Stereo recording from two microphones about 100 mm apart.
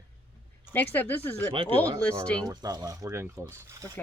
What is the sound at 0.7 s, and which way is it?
Speech, 20° left (ahead or behind).